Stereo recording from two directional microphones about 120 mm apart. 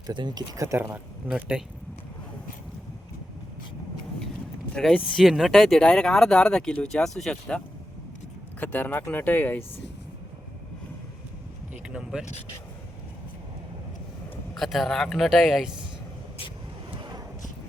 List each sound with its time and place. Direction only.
0.1 s speech: 40° right (ahead or behind)
0.9 s speech: 10° right (ahead or behind)
4.7 s speech: 5° left (ahead or behind)
8.6 s speech: 15° left (ahead or behind)
11.9 s speech: 5° right (ahead or behind)
14.5 s speech: centre (ahead or behind)
16.9 s vehicle: 40° right (ahead or behind)